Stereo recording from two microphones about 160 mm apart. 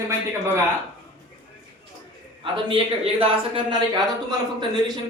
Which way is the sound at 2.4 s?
30° right (ahead or behind).